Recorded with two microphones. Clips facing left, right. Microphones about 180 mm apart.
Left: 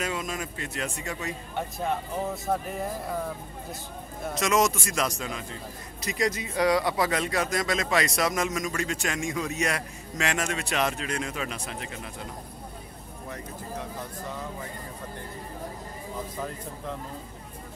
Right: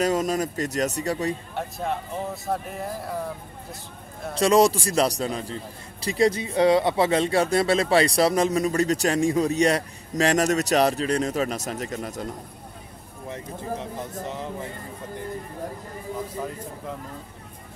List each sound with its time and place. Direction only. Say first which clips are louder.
0.0 s a man's voice: right 9 dB; 40° right (ahead or behind)
1.5 s speech: right 1 dB; centre (ahead or behind)
4.4 s a man's voice: right 6 dB; 30° right (ahead or behind)
14.2 s speech: right 3 dB; 25° right (ahead or behind)